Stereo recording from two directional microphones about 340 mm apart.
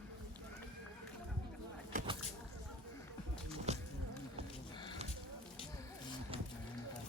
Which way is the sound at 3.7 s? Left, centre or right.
Centre.